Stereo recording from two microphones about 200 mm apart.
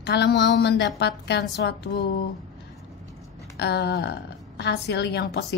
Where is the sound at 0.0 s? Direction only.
55° left (ahead or behind).